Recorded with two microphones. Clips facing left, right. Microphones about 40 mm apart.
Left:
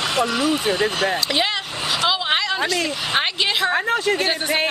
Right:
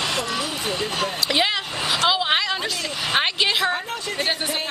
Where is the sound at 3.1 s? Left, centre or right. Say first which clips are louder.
Right 1 dB; centre.